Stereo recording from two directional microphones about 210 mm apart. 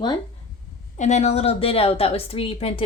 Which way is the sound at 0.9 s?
35° left (ahead or behind).